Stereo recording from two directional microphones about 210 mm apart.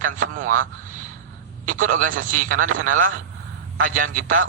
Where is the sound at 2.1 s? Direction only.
70° right (ahead or behind).